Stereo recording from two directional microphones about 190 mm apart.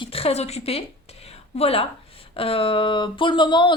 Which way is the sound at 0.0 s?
30° left (ahead or behind).